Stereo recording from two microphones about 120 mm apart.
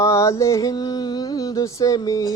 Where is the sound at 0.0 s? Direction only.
25° left (ahead or behind).